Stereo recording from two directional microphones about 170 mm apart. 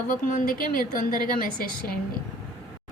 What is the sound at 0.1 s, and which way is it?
A woman's voice, 55° left (ahead or behind).